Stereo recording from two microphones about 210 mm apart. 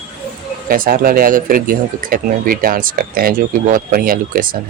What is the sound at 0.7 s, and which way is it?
Speech, 45° right (ahead or behind).